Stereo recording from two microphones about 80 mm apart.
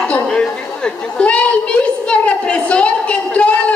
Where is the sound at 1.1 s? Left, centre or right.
Centre.